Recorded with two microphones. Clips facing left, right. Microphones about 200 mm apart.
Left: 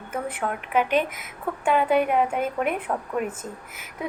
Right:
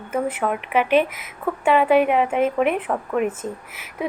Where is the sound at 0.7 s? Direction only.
60° right (ahead or behind).